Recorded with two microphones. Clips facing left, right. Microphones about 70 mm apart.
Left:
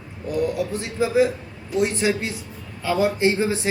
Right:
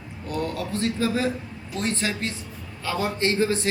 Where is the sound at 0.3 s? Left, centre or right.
Centre.